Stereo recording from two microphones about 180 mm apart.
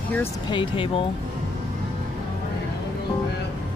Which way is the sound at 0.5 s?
30° left (ahead or behind).